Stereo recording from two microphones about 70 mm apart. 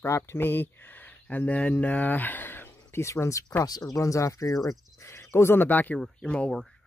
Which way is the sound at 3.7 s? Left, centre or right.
Left.